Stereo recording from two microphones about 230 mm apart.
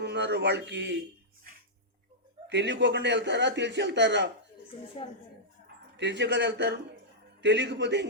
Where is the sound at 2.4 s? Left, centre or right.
Right.